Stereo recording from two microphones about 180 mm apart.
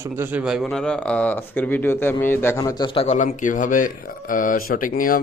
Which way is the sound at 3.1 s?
45° left (ahead or behind).